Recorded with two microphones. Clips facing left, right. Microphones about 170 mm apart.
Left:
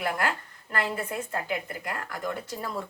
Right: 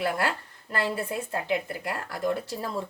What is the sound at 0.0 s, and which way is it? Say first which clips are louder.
A woman's voice: right 1 dB; 30° right (ahead or behind).